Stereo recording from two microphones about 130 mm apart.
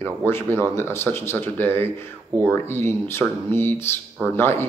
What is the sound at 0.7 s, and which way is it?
Speech, 20° left (ahead or behind).